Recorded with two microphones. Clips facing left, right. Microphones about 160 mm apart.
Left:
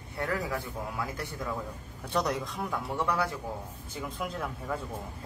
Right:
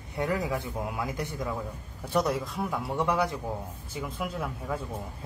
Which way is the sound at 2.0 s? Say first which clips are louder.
Right 3 dB; 5° right (ahead or behind).